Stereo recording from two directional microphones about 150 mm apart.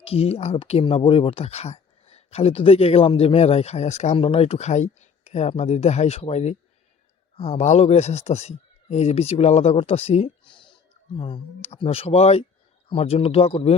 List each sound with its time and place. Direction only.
0.0 s speech: 40° left (ahead or behind)